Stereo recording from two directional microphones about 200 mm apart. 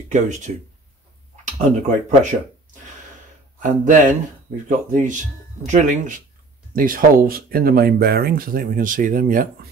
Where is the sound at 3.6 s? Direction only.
40° right (ahead or behind).